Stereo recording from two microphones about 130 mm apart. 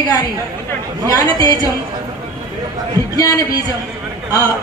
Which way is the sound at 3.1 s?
25° left (ahead or behind).